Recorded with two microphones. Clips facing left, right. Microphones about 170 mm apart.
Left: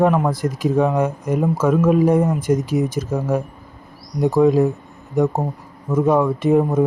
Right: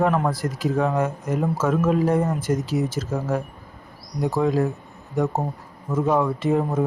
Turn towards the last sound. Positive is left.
turn(degrees=15)  # may be behind; listen again after turning